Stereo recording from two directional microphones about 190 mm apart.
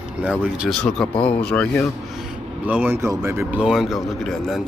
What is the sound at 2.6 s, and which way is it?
Speech, 10° right (ahead or behind).